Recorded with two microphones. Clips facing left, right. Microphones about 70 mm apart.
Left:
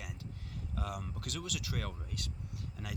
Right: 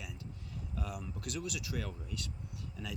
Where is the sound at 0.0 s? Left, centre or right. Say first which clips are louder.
Even; left.